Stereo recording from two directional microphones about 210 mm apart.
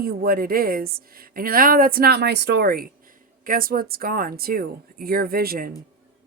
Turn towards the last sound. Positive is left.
turn(degrees=-45)  # may be behind; listen again after turning